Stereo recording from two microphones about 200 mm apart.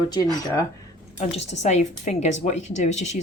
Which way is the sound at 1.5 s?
35° left (ahead or behind).